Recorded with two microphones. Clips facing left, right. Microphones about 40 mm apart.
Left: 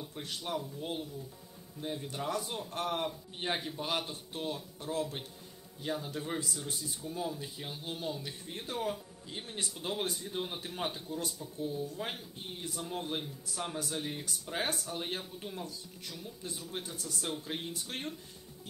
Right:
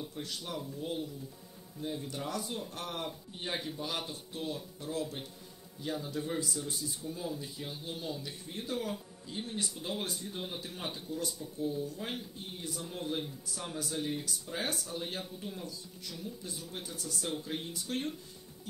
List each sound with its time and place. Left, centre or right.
0.1 s speech: left
10.2 s speech: centre
10.6 s speech: left
13.1 s speech: left